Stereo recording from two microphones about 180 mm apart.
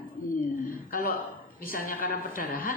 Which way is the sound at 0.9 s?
55° left (ahead or behind).